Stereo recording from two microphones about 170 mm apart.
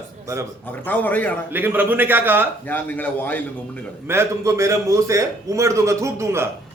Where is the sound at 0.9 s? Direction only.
10° left (ahead or behind).